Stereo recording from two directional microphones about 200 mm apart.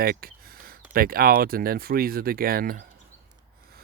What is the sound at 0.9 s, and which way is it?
Speech, 50° right (ahead or behind).